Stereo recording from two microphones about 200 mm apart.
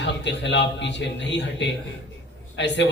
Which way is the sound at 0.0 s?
60° left (ahead or behind).